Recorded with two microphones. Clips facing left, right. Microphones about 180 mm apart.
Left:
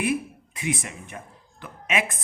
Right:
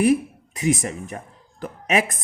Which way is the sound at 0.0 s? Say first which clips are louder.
Right 8 dB; 40° right (ahead or behind).